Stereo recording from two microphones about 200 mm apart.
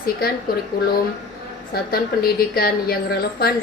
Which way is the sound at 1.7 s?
50° left (ahead or behind).